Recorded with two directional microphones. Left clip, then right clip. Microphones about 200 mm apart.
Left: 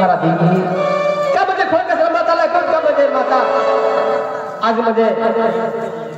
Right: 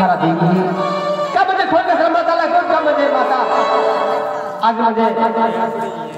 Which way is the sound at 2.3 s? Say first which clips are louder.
Even; 30° left (ahead or behind).